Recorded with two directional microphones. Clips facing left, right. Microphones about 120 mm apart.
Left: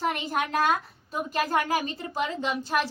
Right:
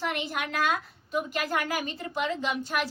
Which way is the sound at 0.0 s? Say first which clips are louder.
Left 4 dB; 40° left (ahead or behind).